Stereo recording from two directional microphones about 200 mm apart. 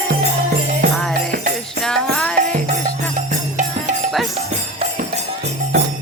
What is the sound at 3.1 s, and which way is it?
Music, 35° right (ahead or behind).